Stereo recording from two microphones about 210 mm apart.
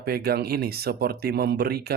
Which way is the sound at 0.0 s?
50° right (ahead or behind).